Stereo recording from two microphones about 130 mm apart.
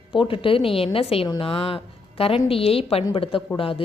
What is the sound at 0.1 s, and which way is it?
A woman's voice, 40° left (ahead or behind).